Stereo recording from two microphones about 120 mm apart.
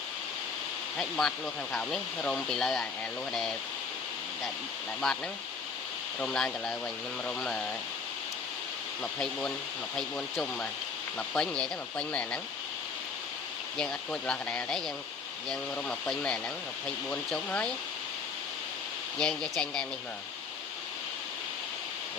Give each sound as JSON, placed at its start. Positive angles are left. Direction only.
{"t": 0.9, "sound": "speech", "side_deg": 5}
{"t": 5.0, "sound": "speech", "side_deg": 5}
{"t": 9.1, "sound": "speech", "side_deg": 5}
{"t": 13.7, "sound": "speech", "side_deg": 5}
{"t": 19.2, "sound": "speech", "side_deg": 5}